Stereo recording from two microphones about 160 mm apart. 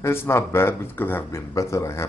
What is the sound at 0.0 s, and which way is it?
Speech, 15° left (ahead or behind).